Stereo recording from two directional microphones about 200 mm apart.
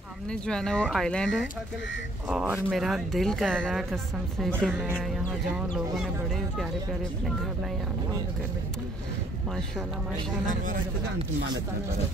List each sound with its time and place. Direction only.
0.3 s speech: 5° left (ahead or behind)
6.6 s speech: centre (ahead or behind)
10.4 s a man's voice: 40° right (ahead or behind)